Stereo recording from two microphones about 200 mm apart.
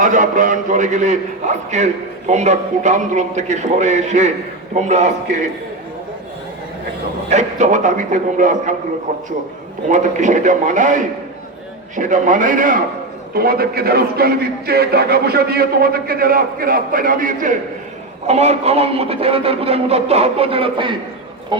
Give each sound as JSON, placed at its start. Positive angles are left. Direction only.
{"t": 0.0, "sound": "a man's voice", "side_deg": -40}
{"t": 7.3, "sound": "a man's voice", "side_deg": -35}